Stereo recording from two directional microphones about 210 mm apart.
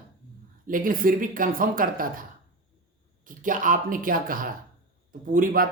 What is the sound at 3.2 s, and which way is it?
Speech, 40° right (ahead or behind).